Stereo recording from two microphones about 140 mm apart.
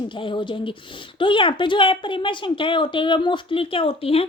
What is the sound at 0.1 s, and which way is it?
A woman's voice, 35° left (ahead or behind).